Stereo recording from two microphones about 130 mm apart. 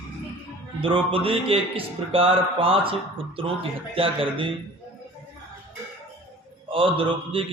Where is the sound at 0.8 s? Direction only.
45° right (ahead or behind).